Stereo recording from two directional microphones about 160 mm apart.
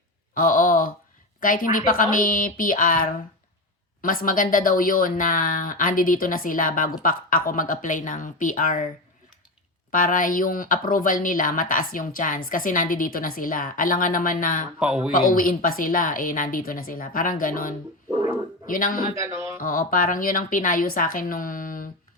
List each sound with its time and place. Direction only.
0.3 s a sound: 60° left (ahead or behind)
1.4 s speech: 60° left (ahead or behind)
9.9 s speech: 55° left (ahead or behind)
14.8 s speech: 5° right (ahead or behind)
15.1 s speech: 60° left (ahead or behind)
18.1 s a sound: 15° right (ahead or behind)
18.6 s speech: 60° left (ahead or behind)
19.1 s mantra: 15° right (ahead or behind)
19.5 s speech: 60° left (ahead or behind)